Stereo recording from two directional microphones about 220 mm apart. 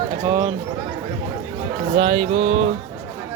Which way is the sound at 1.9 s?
25° right (ahead or behind).